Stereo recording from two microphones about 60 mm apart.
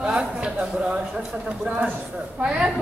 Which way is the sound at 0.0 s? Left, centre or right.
Centre.